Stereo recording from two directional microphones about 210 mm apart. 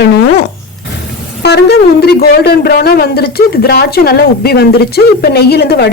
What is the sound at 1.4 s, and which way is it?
Speech, 50° left (ahead or behind).